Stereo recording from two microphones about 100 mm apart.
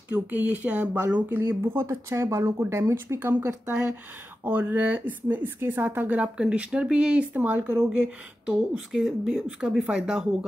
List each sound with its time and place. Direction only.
0.1 s speech: 15° right (ahead or behind)